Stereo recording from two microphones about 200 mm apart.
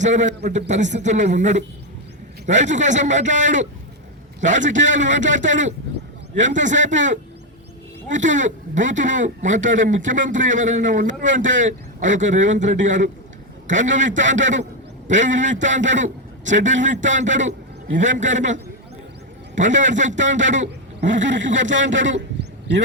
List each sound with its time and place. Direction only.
0.0 s speech: 35° right (ahead or behind)
21.2 s speech: 65° right (ahead or behind)
22.4 s a sound: 55° right (ahead or behind)